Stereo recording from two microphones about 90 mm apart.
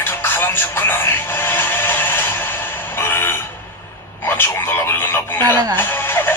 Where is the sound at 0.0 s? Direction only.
25° left (ahead or behind).